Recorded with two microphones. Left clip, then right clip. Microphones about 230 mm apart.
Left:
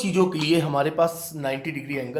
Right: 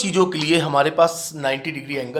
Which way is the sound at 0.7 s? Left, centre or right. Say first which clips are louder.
Right 5 dB; right.